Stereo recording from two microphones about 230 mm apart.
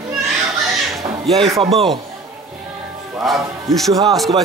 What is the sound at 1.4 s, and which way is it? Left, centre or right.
Speech, right.